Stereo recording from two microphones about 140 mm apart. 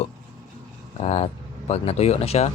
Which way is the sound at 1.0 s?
50° left (ahead or behind).